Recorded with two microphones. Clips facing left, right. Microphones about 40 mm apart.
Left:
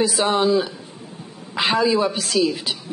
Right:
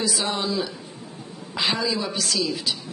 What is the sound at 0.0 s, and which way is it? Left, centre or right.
Speech, left.